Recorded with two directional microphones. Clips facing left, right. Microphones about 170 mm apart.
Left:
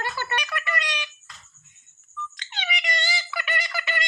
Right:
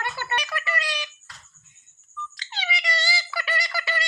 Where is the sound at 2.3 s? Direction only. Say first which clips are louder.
Right 2 dB; 35° right (ahead or behind).